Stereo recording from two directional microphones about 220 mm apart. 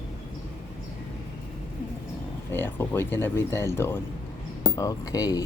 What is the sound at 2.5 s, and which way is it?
A man's voice, 10° left (ahead or behind).